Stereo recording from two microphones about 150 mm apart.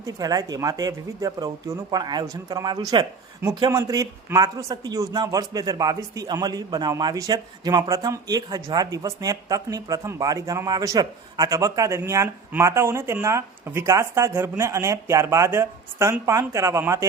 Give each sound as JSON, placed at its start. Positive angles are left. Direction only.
{"t": 0.0, "sound": "speech", "side_deg": -25}